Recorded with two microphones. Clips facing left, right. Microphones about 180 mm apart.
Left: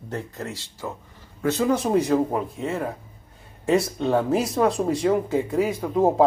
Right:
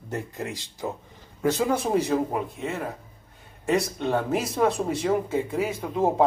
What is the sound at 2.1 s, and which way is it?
Speech, centre (ahead or behind).